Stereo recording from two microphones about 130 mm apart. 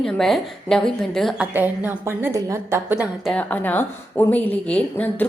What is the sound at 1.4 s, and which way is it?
A woman's voice, 15° right (ahead or behind).